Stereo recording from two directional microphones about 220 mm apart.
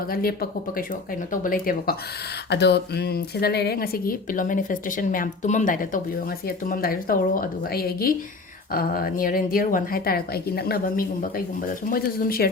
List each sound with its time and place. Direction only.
0.1 s a woman's voice: 40° left (ahead or behind)
2.5 s a woman's voice: 50° left (ahead or behind)